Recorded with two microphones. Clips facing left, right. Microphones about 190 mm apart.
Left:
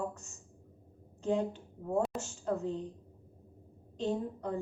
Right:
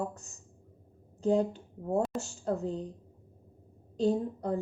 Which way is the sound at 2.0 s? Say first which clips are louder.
Right 1 dB; centre (ahead or behind).